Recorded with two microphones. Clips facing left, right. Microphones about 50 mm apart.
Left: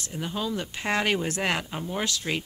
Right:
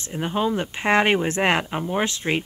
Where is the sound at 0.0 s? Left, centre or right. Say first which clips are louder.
Right 7 dB; right.